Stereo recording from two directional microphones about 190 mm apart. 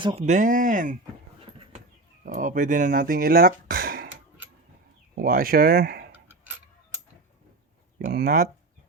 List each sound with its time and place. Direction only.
0.0 s speech: 25° right (ahead or behind)
0.3 s speech: 40° right (ahead or behind)
2.2 s speech: 45° right (ahead or behind)
5.1 s speech: 50° right (ahead or behind)
6.1 s a sound: 10° right (ahead or behind)
7.9 s speech: 50° right (ahead or behind)